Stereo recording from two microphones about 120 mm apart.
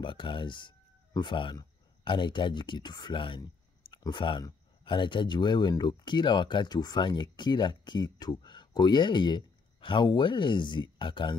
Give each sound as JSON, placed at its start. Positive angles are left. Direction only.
{"t": 0.0, "sound": "speech", "side_deg": 45}